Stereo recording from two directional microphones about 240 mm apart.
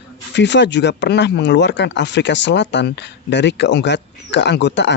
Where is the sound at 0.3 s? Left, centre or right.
Left.